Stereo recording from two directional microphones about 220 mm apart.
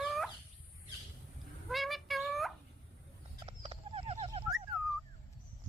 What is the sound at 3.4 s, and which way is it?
Horse, 25° right (ahead or behind).